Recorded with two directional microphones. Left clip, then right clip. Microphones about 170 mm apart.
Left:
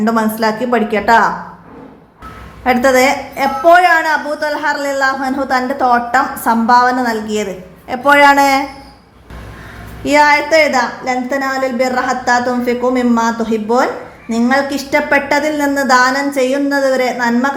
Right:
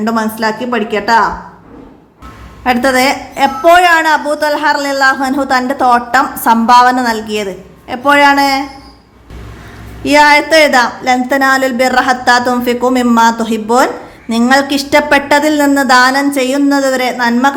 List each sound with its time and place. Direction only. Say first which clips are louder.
0.0 s a woman's voice: even; 15° right (ahead or behind)
2.6 s a woman's voice: even; 20° right (ahead or behind); by 8.6 s centre (ahead or behind)
10.0 s a woman's voice: right 3 dB; 20° right (ahead or behind)